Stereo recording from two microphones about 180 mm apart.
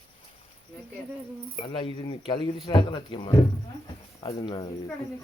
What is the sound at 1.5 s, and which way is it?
Speech, 30° left (ahead or behind).